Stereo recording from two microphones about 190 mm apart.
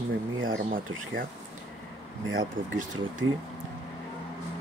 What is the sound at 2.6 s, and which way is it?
Speech, 85° right.